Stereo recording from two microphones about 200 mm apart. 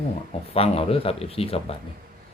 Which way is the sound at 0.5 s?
30° left (ahead or behind).